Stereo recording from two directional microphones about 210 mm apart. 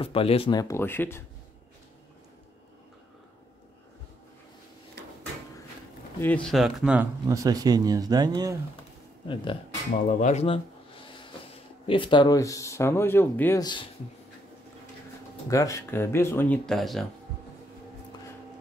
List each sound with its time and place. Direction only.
0.0 s speech: 25° left (ahead or behind); by 1.2 s 10° left (ahead or behind)
6.2 s speech: 5° left (ahead or behind)
7.2 s speech: 15° right (ahead or behind)
9.3 s speech: 25° left (ahead or behind)
10.0 s a sound: 35° left (ahead or behind)
11.8 s speech: 25° left (ahead or behind)
15.5 s speech: 15° left (ahead or behind)